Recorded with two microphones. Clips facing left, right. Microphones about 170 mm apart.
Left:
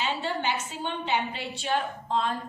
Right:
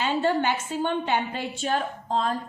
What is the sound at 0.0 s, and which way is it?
A woman's voice, 50° right (ahead or behind).